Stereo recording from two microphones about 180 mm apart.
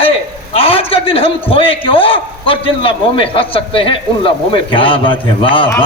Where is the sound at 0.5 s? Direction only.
30° left (ahead or behind).